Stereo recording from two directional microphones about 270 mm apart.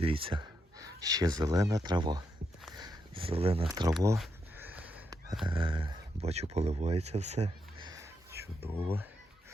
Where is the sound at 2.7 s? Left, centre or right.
Centre.